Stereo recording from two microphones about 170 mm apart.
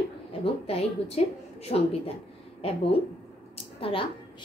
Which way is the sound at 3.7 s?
30° left (ahead or behind).